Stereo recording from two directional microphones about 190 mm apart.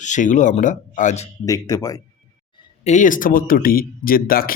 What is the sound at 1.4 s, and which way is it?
Speech, 20° left (ahead or behind).